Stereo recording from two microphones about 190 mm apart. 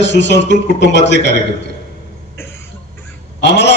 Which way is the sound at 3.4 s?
65° left (ahead or behind).